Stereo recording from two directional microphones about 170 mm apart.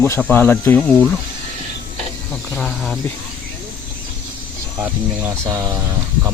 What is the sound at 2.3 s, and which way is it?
Speech, 5° left (ahead or behind).